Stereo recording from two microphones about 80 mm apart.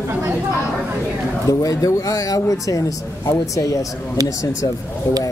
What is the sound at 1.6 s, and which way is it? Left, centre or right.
Speech, left.